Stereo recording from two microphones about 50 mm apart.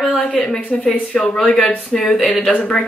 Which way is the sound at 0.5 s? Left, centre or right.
Left.